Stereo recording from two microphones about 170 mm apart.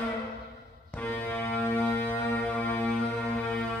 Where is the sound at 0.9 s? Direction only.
10° left (ahead or behind).